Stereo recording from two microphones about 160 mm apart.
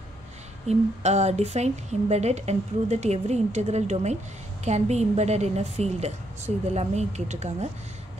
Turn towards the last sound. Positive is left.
turn(degrees=-45)  # may be behind; listen again after turning